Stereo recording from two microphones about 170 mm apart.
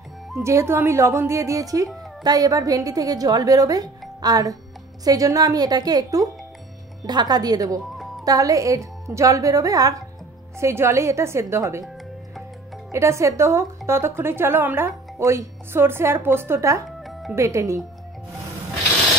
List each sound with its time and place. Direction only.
0.4 s a woman's voice: 15° right (ahead or behind)
12.9 s speech: 15° right (ahead or behind)
17.0 s music: centre (ahead or behind)
17.4 s speech: 15° right (ahead or behind)